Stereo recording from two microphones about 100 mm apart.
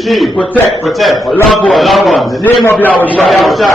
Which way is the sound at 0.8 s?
Centre (ahead or behind).